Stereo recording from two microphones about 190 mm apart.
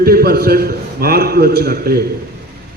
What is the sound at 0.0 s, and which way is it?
A man's voice, 55° right (ahead or behind).